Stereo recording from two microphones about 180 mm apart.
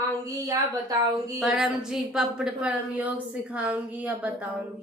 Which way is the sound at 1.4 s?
5° right (ahead or behind).